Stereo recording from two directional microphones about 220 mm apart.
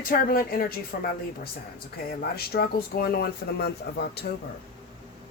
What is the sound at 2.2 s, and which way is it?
Speech, 45° left (ahead or behind).